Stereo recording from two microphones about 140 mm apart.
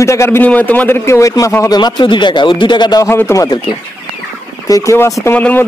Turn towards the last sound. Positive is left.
turn(degrees=10)  # may be behind; listen again after turning